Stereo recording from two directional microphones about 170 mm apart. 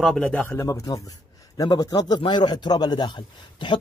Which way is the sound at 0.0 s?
5° left (ahead or behind).